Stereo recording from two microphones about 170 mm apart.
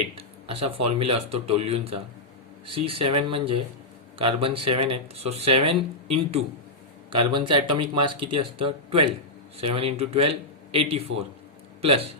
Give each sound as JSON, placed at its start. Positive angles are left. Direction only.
{"t": 0.2, "sound": "speech", "side_deg": -35}